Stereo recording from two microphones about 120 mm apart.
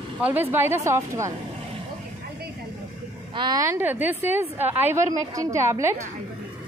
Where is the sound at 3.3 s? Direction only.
40° right (ahead or behind).